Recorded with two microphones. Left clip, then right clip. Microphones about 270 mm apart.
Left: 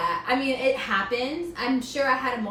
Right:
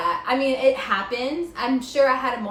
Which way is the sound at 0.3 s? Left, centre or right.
Centre.